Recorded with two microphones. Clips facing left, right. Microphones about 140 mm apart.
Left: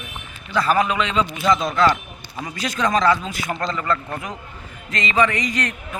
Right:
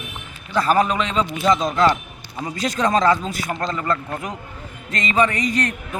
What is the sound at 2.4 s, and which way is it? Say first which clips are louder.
Speech: right 2 dB; 35° right (ahead or behind).